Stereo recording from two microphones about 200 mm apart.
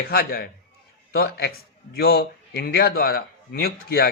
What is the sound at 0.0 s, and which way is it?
A man's voice, 50° left (ahead or behind).